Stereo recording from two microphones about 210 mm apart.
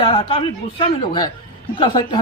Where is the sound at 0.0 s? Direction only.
25° left (ahead or behind).